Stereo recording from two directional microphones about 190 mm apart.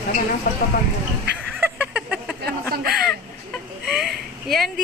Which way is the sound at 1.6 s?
10° right (ahead or behind).